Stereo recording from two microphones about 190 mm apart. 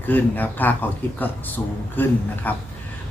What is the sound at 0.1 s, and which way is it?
Speech, 10° left (ahead or behind).